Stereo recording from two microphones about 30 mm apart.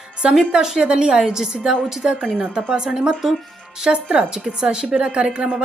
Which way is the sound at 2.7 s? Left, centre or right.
Right.